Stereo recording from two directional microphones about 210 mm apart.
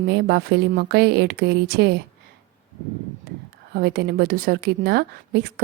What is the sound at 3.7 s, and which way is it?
A woman's voice, 50° right (ahead or behind).